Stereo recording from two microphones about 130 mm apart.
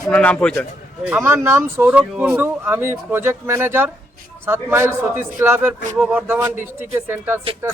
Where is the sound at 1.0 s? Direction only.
15° right (ahead or behind).